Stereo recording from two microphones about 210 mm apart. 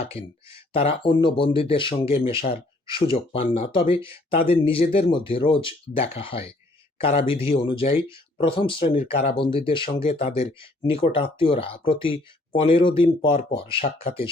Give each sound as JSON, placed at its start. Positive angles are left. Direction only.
{"t": 0.0, "sound": "speech", "side_deg": 30}